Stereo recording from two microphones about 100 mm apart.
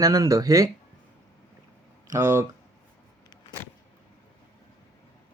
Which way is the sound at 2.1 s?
25° right (ahead or behind).